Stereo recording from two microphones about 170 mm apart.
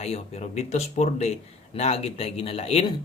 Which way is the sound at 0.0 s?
40° left (ahead or behind).